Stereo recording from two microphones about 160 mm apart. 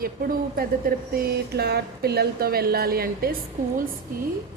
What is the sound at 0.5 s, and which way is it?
A woman's voice, 65° right (ahead or behind).